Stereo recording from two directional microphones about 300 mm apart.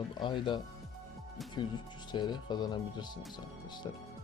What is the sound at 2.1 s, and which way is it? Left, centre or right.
Speech, centre.